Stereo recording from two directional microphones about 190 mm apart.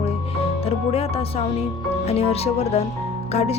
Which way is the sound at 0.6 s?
30° left (ahead or behind).